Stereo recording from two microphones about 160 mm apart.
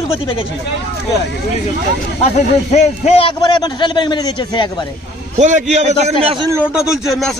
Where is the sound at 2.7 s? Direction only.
40° left (ahead or behind).